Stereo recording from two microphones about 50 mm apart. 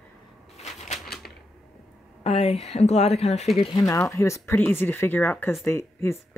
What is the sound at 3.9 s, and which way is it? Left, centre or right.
Speech, left.